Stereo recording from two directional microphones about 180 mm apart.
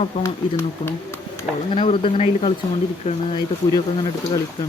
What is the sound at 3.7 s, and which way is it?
Speech, 20° left (ahead or behind).